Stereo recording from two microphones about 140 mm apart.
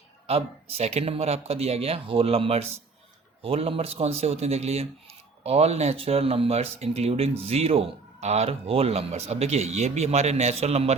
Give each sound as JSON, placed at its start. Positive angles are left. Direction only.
{"t": 0.3, "sound": "speech", "side_deg": -45}